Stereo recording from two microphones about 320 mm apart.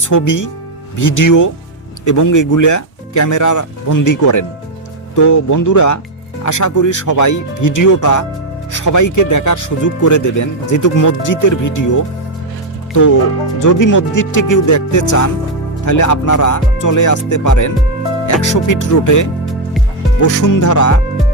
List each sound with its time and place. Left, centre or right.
0.0 s speech: left
13.6 s speech: left